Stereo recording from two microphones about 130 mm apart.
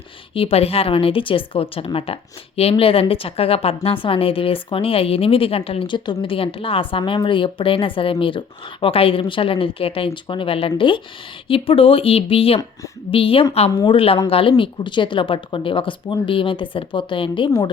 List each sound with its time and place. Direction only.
0.3 s a woman's voice: 50° left (ahead or behind)
13.7 s a woman's voice: 30° left (ahead or behind)
13.9 s a woman's voice: 45° left (ahead or behind)